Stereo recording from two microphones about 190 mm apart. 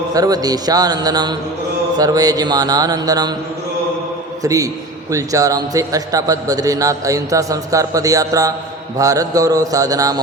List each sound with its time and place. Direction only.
0.1 s speech: 20° right (ahead or behind)
4.4 s a man's voice: 15° right (ahead or behind)